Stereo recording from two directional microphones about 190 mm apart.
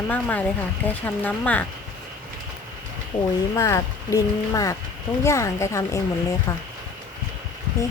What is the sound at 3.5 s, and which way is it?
Speech, 15° left (ahead or behind).